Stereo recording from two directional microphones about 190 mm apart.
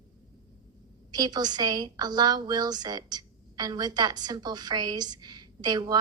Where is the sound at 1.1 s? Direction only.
20° right (ahead or behind).